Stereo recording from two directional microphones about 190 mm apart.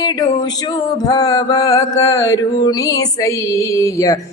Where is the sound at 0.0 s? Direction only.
20° left (ahead or behind).